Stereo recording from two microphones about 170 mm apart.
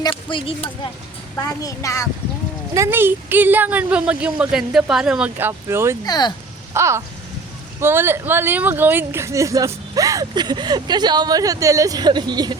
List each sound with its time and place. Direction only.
0.0 s a woman's voice: 30° left (ahead or behind)
1.4 s a woman's voice: 20° left (ahead or behind)
2.7 s speech: 15° right (ahead or behind)
6.1 s a woman's voice: 25° left (ahead or behind)
6.7 s speech: 15° right (ahead or behind)